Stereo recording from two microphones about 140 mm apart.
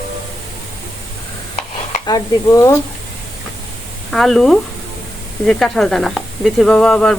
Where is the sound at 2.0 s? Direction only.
25° left (ahead or behind).